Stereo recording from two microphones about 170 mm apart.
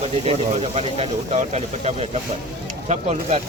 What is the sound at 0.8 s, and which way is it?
Speech, 35° right (ahead or behind).